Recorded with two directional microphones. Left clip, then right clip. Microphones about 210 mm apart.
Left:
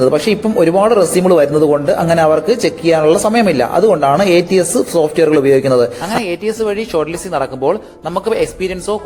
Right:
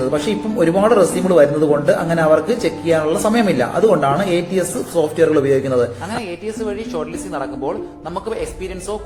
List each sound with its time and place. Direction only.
0.1 s speech: 40° left (ahead or behind)